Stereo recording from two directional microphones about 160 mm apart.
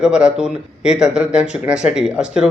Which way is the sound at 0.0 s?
5° right (ahead or behind).